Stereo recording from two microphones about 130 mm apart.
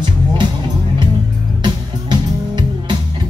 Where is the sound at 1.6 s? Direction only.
35° right (ahead or behind).